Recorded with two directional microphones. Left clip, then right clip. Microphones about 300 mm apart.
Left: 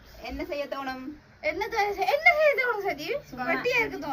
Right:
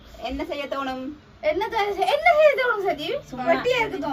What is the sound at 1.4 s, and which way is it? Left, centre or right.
A woman's voice, right.